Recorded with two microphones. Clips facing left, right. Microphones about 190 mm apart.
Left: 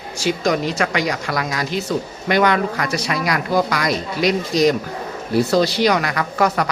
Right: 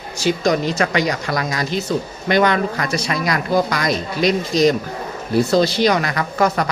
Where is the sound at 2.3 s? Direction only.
10° left (ahead or behind).